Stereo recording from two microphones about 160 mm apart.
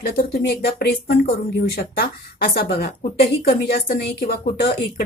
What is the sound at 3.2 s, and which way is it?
A woman's voice, 70° left (ahead or behind).